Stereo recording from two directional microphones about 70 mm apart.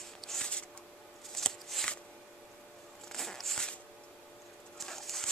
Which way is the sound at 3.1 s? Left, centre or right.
Centre.